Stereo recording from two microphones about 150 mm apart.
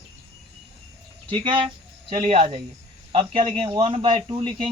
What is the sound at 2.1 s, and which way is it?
Speech, 45° right (ahead or behind).